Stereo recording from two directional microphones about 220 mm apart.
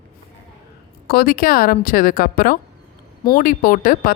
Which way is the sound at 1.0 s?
40° left (ahead or behind).